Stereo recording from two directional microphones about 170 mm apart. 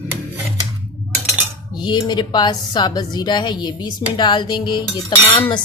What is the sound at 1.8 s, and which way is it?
A woman's voice, 25° left (ahead or behind).